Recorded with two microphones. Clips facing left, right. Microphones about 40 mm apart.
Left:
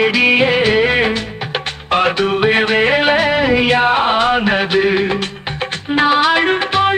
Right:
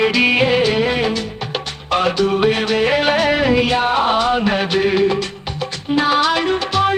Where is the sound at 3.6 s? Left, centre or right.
Left.